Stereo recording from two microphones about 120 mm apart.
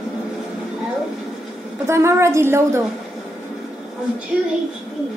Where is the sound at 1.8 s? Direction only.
20° right (ahead or behind).